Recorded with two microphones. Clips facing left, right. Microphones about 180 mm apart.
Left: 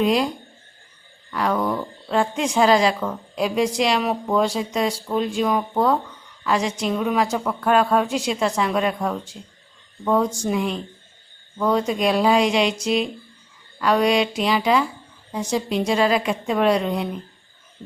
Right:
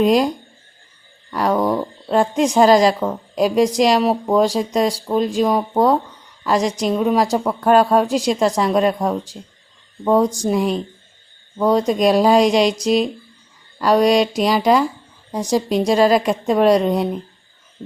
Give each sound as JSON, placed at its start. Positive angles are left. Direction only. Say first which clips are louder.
{"t": 0.0, "sound": "speech", "louder": "right 5 dB", "side_deg": -40}
{"t": 1.3, "sound": "a woman's voice", "louder": "right 4 dB", "side_deg": -40}